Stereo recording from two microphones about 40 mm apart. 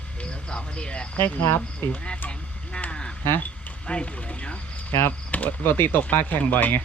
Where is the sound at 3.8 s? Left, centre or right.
Left.